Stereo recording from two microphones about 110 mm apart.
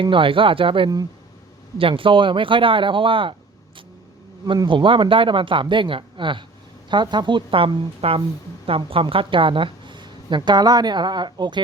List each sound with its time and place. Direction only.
0.0 s a woman's voice: 50° right (ahead or behind)
4.4 s a woman's voice: 45° right (ahead or behind)